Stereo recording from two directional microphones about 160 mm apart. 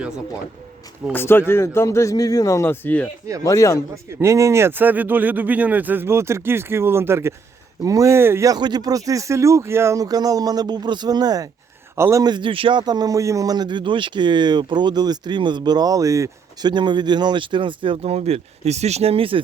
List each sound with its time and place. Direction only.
1.1 s a man's voice: 15° left (ahead or behind)
4.2 s a man's voice: 20° right (ahead or behind); by 19.4 s 35° right (ahead or behind)